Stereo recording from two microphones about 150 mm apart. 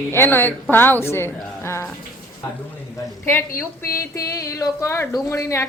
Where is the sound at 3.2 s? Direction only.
15° left (ahead or behind).